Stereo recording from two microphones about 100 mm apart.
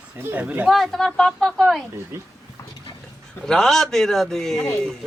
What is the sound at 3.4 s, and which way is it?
A man's voice, 5° left (ahead or behind).